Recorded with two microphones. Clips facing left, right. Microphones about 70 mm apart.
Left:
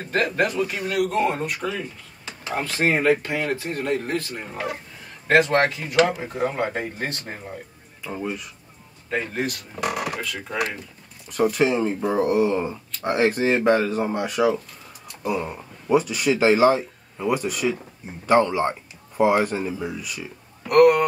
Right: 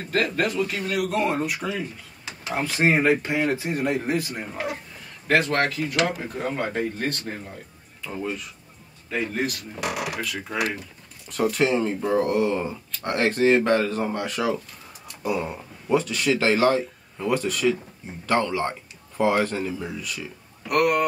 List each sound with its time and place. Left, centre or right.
0.1 s speech: left
0.8 s speech: centre
2.6 s speech: centre
5.4 s speech: centre
8.0 s speech: centre
15.9 s speech: centre